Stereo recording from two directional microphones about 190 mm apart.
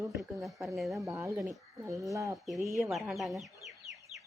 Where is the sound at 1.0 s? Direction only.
15° right (ahead or behind).